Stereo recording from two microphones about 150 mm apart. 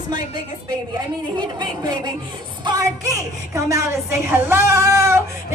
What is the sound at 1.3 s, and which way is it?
A woman's voice, 25° right (ahead or behind).